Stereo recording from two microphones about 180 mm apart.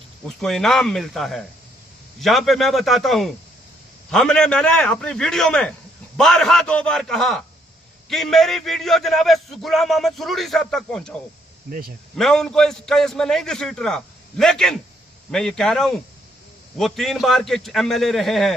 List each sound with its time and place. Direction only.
0.3 s a man's voice: centre (ahead or behind)
11.7 s speech: 55° right (ahead or behind)
12.1 s a man's voice: 5° left (ahead or behind)